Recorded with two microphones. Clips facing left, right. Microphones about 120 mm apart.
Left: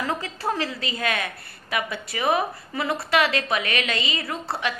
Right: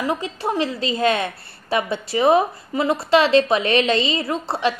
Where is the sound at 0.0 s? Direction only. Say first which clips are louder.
Right 4 dB; 20° right (ahead or behind).